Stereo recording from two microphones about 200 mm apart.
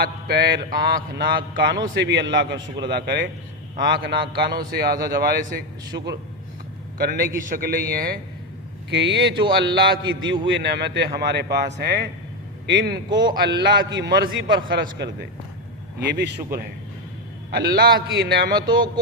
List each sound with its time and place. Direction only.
0.0 s a man's voice: 55° right (ahead or behind)
8.9 s speech: 60° right (ahead or behind)
13.1 s a man's voice: 20° right (ahead or behind)
13.5 s a man's voice: 60° right (ahead or behind)
18.6 s a man's voice: 20° right (ahead or behind)